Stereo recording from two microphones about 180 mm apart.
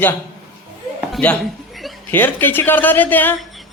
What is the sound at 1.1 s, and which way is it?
Speech, 10° left (ahead or behind).